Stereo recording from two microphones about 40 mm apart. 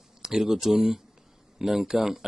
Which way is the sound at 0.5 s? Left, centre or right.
Centre.